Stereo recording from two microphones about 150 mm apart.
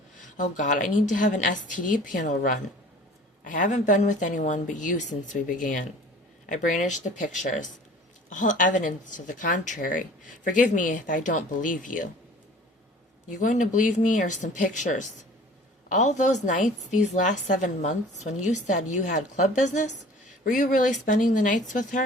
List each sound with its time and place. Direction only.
0.2 s a woman's voice: 60° left (ahead or behind)
8.3 s a woman's voice: 60° left (ahead or behind)
13.2 s a woman's voice: 55° left (ahead or behind)